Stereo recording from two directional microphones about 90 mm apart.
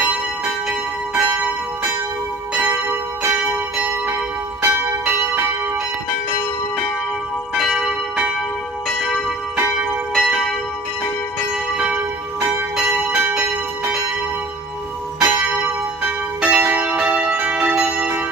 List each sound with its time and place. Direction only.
3.3 s church bell: 20° right (ahead or behind)
7.5 s church bell: 5° right (ahead or behind)
10.1 s church bell: centre (ahead or behind)
11.8 s church bell: 15° right (ahead or behind)
15.2 s church bell: 20° right (ahead or behind)
16.0 s change ringing: 15° right (ahead or behind)